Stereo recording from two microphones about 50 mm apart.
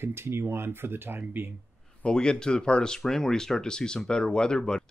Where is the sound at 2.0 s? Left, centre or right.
Centre.